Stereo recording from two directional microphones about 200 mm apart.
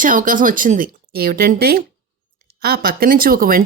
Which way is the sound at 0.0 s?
40° right (ahead or behind).